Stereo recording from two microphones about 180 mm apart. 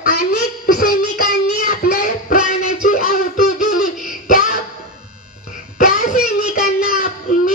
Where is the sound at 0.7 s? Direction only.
50° left (ahead or behind).